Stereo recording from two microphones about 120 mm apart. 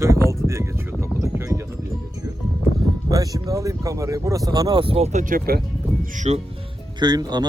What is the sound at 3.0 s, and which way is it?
Speech, 30° right (ahead or behind).